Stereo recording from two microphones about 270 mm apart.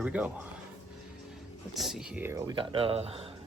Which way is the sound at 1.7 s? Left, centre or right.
Centre.